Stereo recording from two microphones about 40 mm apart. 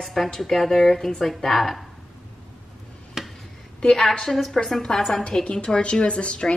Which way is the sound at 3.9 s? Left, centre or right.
Centre.